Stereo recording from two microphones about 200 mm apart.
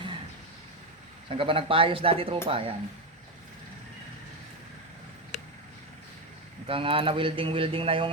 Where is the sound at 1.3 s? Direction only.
30° right (ahead or behind).